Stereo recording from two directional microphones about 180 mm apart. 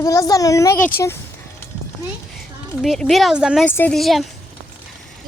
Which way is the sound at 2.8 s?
Centre (ahead or behind).